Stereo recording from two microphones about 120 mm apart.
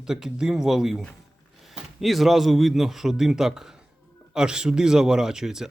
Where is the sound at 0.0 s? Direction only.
5° right (ahead or behind).